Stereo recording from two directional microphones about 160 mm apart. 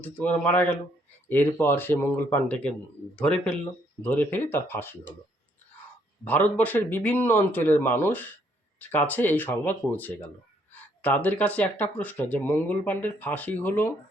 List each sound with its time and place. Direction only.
0.0 s speech: 10° left (ahead or behind)
6.2 s speech: 10° left (ahead or behind)